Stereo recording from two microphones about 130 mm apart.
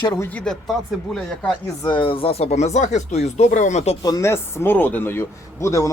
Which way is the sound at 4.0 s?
25° left (ahead or behind).